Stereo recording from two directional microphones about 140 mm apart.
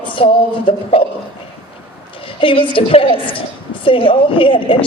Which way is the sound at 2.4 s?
40° left (ahead or behind).